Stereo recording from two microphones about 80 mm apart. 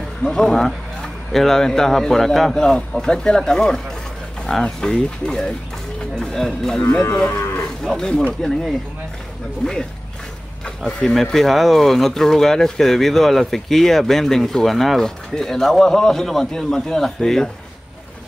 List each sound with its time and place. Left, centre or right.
0.2 s a man's voice: centre
7.0 s moo: left
7.8 s a man's voice: centre
9.6 s a man's voice: centre
10.9 s speech: centre